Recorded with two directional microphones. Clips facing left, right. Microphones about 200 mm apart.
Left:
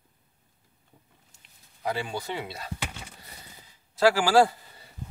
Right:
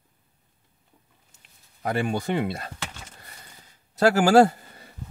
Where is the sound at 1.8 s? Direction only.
55° right (ahead or behind).